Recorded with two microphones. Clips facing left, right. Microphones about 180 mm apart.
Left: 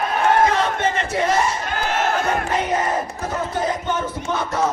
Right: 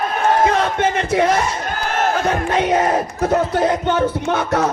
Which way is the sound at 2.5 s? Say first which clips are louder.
Right 5 dB; 75° right (ahead or behind).